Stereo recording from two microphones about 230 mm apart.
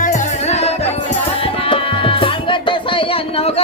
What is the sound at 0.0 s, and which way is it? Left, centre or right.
Music, left.